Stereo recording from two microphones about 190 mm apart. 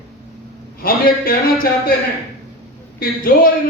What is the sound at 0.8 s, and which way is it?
A man's voice, 50° left (ahead or behind).